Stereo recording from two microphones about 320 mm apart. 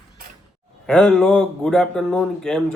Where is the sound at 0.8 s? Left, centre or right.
Centre.